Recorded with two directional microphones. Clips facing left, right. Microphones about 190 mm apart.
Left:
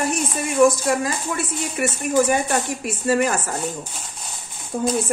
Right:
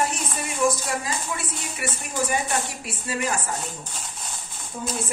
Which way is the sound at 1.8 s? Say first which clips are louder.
Left 10 dB; 50° left (ahead or behind).